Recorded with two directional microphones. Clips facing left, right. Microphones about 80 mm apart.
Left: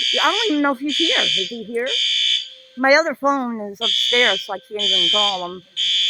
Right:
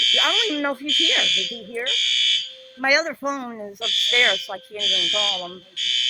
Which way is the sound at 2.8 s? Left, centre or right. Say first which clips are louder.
Left 6 dB; left.